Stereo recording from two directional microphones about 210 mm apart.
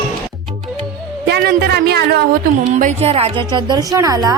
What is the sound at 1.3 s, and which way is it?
Speech, 50° right (ahead or behind).